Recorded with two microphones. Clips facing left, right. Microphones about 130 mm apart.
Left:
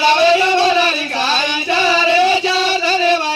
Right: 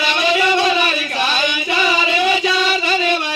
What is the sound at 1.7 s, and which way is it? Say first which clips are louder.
Music: left 4 dB; 30° left (ahead or behind).